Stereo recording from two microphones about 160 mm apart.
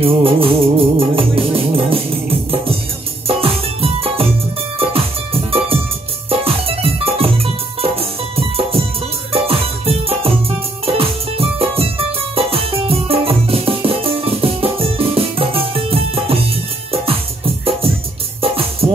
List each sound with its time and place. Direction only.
0.0 s music: 35° right (ahead or behind)
18.4 s music: 35° right (ahead or behind)